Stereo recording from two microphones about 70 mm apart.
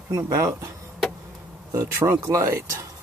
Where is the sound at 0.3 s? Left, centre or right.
Right.